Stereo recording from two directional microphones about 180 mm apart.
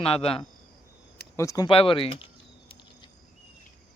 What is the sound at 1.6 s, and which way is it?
Speech, 30° left (ahead or behind).